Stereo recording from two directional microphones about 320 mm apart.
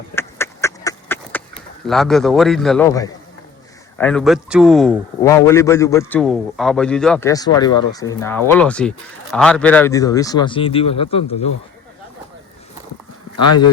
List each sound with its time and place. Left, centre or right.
0.2 s duck: centre
1.9 s a man's voice: centre
13.4 s speech: left